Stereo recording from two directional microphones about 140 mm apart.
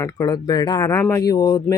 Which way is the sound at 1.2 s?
25° left (ahead or behind).